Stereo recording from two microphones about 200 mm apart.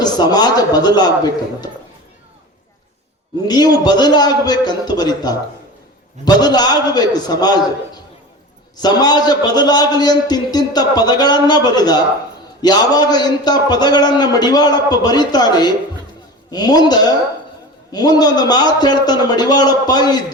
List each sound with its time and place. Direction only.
0.0 s a man's voice: 20° left (ahead or behind)
3.4 s a man's voice: 20° left (ahead or behind)
8.8 s a man's voice: 20° left (ahead or behind)